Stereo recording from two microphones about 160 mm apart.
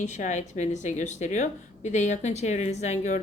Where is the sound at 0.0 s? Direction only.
50° left (ahead or behind).